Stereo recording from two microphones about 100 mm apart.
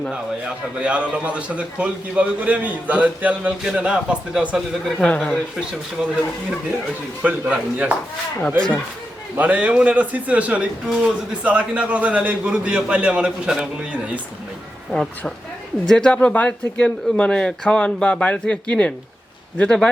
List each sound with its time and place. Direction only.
0.1 s a man's voice: 10° right (ahead or behind)
4.9 s speech: 10° left (ahead or behind)
6.0 s a man's voice: 5° right (ahead or behind)
7.2 s a man's voice: 15° right (ahead or behind)
8.4 s speech: 10° left (ahead or behind)
9.4 s a man's voice: 15° right (ahead or behind)
15.9 s speech: 5° left (ahead or behind)